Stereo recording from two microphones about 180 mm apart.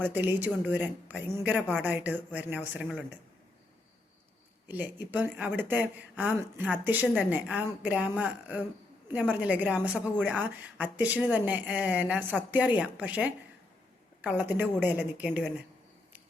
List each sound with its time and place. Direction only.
0.0 s a woman's voice: 10° right (ahead or behind)
5.1 s a woman's voice: 10° right (ahead or behind)